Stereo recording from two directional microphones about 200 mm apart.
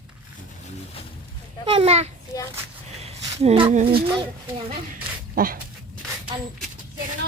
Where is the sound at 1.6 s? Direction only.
25° right (ahead or behind).